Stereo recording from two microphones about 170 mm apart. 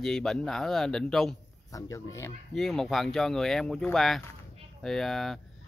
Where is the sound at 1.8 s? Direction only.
15° left (ahead or behind).